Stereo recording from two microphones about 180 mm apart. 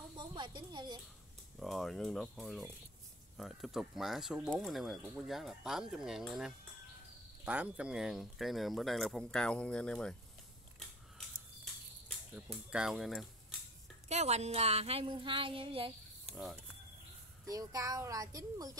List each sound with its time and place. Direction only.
0.2 s speech: 25° right (ahead or behind)
1.6 s speech: centre (ahead or behind)
10.8 s a sound: centre (ahead or behind)
12.7 s speech: 5° right (ahead or behind)
14.0 s a sound: 35° right (ahead or behind)
17.5 s a child's voice: 20° right (ahead or behind)